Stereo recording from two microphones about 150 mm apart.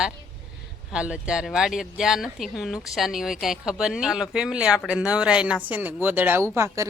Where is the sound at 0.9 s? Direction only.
5° right (ahead or behind).